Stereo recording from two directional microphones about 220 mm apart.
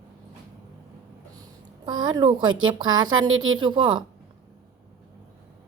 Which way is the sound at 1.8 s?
20° right (ahead or behind).